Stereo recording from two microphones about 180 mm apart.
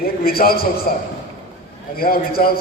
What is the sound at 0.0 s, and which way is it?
Speech, 55° left (ahead or behind).